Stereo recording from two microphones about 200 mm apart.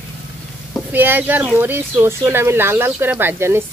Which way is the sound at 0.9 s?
10° right (ahead or behind).